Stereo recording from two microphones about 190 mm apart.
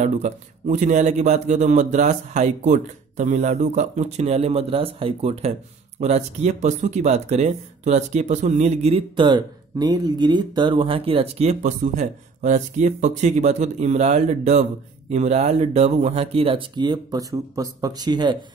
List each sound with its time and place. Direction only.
0.0 s speech: 40° right (ahead or behind); by 18.4 s 25° right (ahead or behind)